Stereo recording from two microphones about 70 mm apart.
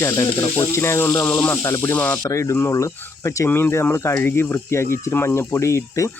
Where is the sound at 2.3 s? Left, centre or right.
Left.